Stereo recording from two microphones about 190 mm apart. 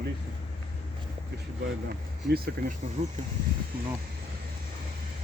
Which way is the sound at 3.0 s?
35° right (ahead or behind).